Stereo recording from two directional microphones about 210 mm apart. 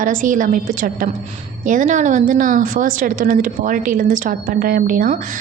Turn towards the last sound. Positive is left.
turn(degrees=-40)  # may be behind; listen again after turning